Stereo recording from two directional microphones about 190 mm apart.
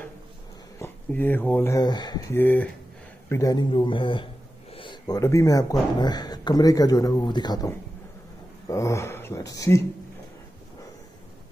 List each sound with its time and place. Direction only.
0.7 s speech: 10° left (ahead or behind)
2.3 s speech: 10° left (ahead or behind)